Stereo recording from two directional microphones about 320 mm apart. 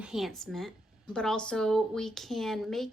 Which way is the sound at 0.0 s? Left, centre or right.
Centre.